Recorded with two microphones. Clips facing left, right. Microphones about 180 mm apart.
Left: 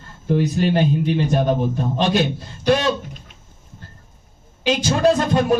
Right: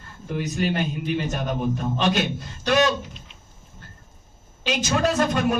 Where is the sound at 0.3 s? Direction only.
30° left (ahead or behind).